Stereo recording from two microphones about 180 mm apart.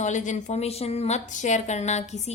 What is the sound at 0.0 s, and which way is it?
A woman's voice, 40° left (ahead or behind).